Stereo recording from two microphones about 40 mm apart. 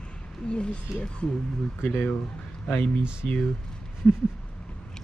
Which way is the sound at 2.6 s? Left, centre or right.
Left.